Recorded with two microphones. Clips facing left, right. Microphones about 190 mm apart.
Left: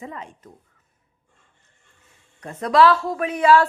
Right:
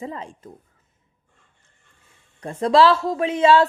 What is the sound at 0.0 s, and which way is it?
Speech, 30° right (ahead or behind).